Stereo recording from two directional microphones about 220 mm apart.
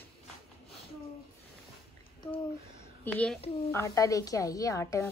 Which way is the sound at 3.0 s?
5° left (ahead or behind).